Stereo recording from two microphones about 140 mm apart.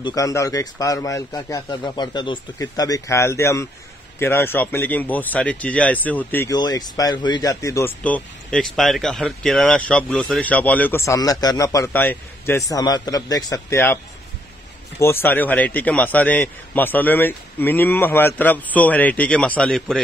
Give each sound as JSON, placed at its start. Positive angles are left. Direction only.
{"t": 0.0, "sound": "speech", "side_deg": 25}
{"t": 6.5, "sound": "speech", "side_deg": 30}
{"t": 8.0, "sound": "speech", "side_deg": 10}
{"t": 15.0, "sound": "speech", "side_deg": 20}